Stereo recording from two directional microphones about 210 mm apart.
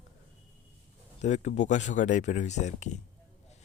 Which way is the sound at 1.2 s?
35° left (ahead or behind).